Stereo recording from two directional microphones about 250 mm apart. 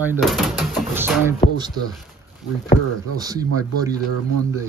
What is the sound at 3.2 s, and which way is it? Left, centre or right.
Speech, centre.